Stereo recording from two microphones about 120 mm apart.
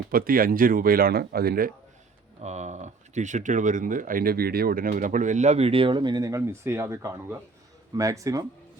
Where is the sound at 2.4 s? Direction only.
70° right (ahead or behind).